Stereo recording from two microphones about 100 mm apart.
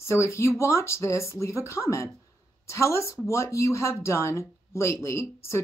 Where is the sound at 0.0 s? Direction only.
30° left (ahead or behind).